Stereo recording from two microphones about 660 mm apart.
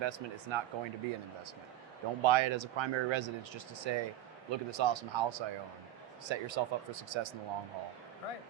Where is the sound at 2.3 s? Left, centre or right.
Right.